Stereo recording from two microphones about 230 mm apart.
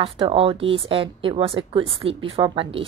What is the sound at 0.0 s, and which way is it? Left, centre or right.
A woman's voice, right.